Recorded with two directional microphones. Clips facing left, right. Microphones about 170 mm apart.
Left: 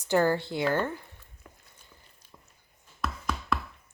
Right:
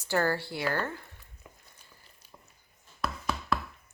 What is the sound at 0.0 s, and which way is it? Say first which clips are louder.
Speech: left 4 dB; 15° left (ahead or behind).